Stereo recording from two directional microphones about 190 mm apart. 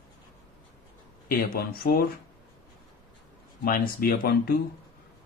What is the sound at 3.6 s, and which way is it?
Speech, 50° left (ahead or behind).